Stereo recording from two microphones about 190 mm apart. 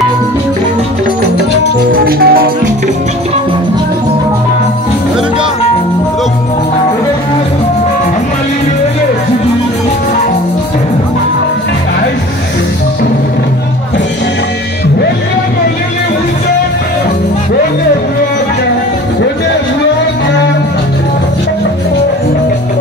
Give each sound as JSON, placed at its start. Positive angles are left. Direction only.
{"t": 1.9, "sound": "music", "side_deg": -50}